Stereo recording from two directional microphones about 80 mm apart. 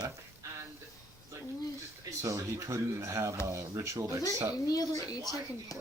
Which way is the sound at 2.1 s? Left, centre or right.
Right.